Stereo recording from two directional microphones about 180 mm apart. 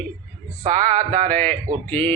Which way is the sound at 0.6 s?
40° right (ahead or behind).